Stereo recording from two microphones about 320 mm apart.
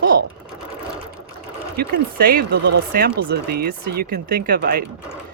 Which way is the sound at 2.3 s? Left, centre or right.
Right.